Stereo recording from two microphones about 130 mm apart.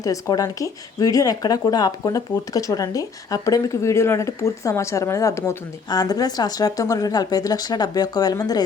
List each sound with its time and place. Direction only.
0.0 s speech: 25° left (ahead or behind)